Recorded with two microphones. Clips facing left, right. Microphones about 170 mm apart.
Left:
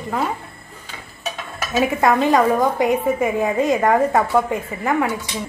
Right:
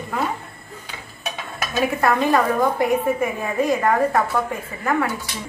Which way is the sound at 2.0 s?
20° left (ahead or behind).